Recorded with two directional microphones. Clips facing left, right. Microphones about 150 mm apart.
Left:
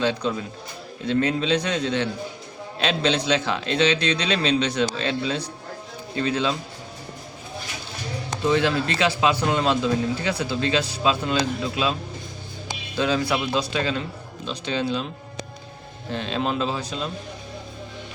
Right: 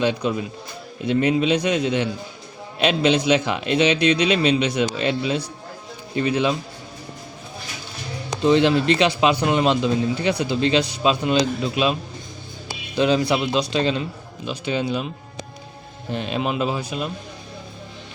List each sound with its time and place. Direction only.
0.0 s a man's voice: 15° right (ahead or behind)
8.4 s speech: 20° right (ahead or behind)
13.0 s speech: 20° right (ahead or behind)
14.4 s a man's voice: 10° right (ahead or behind)
16.1 s a man's voice: 15° right (ahead or behind)